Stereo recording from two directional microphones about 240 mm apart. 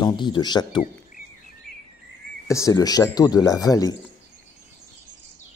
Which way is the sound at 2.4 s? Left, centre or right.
Centre.